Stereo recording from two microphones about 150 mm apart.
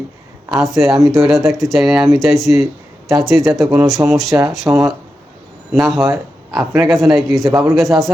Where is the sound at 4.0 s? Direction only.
15° right (ahead or behind).